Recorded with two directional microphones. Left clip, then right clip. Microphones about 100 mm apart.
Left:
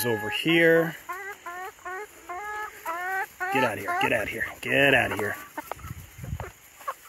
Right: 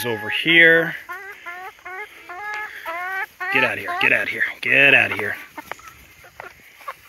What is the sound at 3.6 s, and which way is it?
Speech, 15° left (ahead or behind).